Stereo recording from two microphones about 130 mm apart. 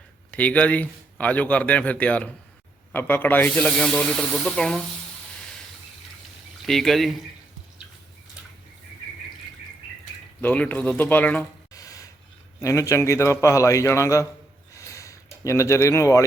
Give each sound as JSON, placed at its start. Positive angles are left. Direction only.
{"t": 0.3, "sound": "a man's voice", "side_deg": 10}
{"t": 6.7, "sound": "speech", "side_deg": 0}
{"t": 10.4, "sound": "a man's voice", "side_deg": 10}
{"t": 11.7, "sound": "a sound", "side_deg": 25}
{"t": 12.6, "sound": "a man's voice", "side_deg": 25}
{"t": 14.7, "sound": "a sound", "side_deg": 25}